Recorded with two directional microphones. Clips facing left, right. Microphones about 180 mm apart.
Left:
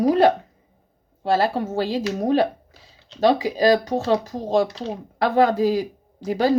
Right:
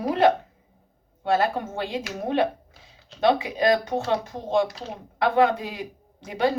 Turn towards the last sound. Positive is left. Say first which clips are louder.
# left 4 dB
turn(degrees=35)  # may be behind; listen again after turning